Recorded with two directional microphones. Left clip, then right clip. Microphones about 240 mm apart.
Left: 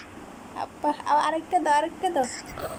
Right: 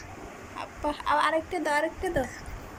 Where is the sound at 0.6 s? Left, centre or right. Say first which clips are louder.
Left 4 dB; centre.